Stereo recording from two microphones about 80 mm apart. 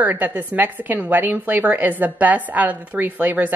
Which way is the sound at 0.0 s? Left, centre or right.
Right.